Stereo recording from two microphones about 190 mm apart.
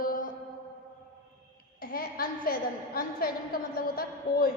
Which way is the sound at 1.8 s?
50° left (ahead or behind).